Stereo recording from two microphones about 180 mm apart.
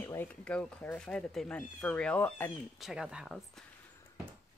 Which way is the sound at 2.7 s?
5° right (ahead or behind).